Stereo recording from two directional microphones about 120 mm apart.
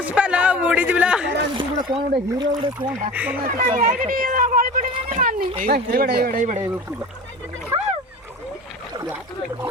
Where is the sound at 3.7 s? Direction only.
90° right.